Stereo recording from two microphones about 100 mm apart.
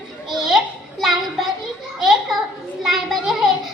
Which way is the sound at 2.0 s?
Centre (ahead or behind).